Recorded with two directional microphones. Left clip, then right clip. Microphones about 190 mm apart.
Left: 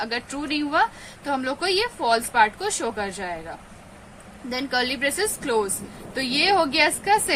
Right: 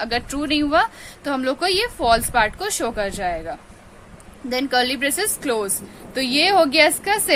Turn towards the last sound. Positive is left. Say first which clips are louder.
# right 3 dB
turn(degrees=-45)  # may be behind; listen again after turning